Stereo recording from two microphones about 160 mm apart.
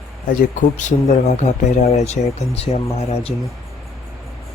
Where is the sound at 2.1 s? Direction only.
40° left (ahead or behind).